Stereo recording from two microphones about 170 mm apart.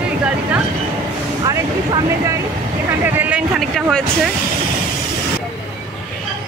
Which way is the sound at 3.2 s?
5° right (ahead or behind).